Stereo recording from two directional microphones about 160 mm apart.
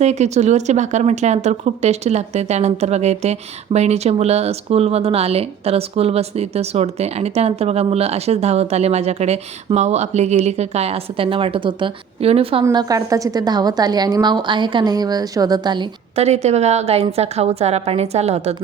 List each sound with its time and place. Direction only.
0.0 s speech: 45° right (ahead or behind)
12.6 s a woman's voice: 20° right (ahead or behind)
16.1 s speech: 45° right (ahead or behind)